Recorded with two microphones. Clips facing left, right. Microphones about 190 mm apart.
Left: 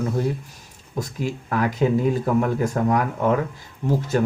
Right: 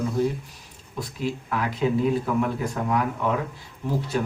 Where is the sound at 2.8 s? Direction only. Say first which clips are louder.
Left 3 dB; 45° left (ahead or behind).